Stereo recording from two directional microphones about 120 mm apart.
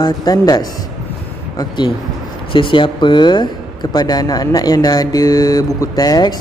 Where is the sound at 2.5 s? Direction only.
45° left (ahead or behind).